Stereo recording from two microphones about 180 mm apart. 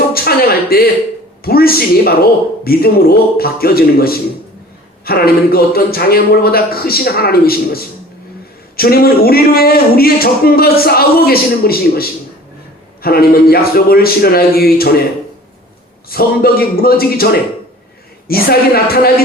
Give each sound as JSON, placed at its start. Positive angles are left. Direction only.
{"t": 0.1, "sound": "a sound", "side_deg": 55}
{"t": 1.5, "sound": "speech", "side_deg": 55}
{"t": 16.0, "sound": "speech", "side_deg": 55}